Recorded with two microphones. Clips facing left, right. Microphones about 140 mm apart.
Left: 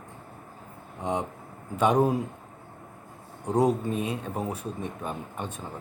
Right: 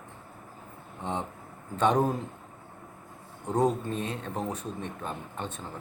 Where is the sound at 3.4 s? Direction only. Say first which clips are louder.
Left 2 dB; 10° left (ahead or behind).